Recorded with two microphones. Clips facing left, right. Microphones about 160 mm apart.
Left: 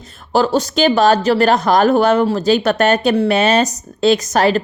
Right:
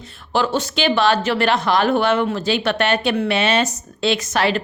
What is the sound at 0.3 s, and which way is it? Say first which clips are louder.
Speech: left 5 dB; 40° left (ahead or behind).